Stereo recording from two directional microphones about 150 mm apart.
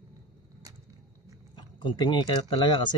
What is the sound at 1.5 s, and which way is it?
Speech, 30° left (ahead or behind).